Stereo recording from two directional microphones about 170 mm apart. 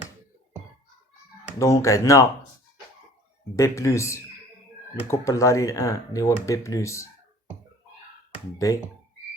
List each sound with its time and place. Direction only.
1.5 s speech: 20° left (ahead or behind)
3.5 s speech: 15° left (ahead or behind)
8.5 s speech: 20° left (ahead or behind)